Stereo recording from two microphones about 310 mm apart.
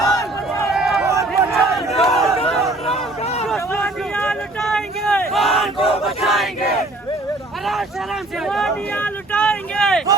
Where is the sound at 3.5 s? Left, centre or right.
Centre.